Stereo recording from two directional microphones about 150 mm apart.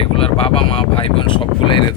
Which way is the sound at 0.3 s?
40° left (ahead or behind).